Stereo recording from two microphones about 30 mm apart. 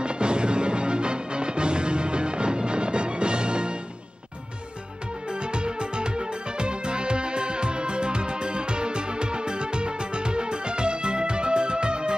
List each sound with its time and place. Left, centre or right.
0.0 s music: right
5.5 s music: right